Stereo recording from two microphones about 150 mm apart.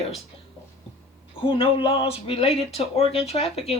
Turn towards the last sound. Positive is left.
turn(degrees=40)  # may be behind; listen again after turning